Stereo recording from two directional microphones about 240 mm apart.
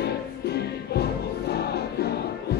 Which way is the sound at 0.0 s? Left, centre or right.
Left.